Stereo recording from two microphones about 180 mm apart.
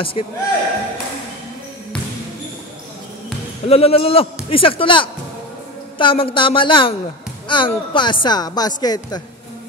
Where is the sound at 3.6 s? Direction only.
35° left (ahead or behind).